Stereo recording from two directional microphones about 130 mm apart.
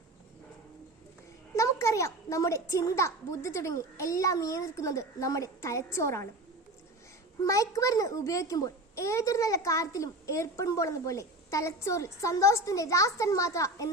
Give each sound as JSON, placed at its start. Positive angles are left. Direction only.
{"t": 1.5, "sound": "a child's voice", "side_deg": 25}
{"t": 7.4, "sound": "a child's voice", "side_deg": 25}